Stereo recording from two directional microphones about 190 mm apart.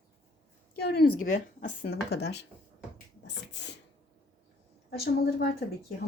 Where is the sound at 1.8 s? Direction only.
60° left (ahead or behind).